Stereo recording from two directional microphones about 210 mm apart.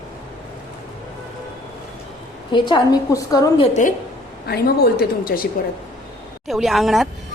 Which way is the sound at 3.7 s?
35° left (ahead or behind).